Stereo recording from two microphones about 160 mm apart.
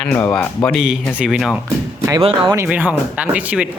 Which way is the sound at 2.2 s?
35° right (ahead or behind).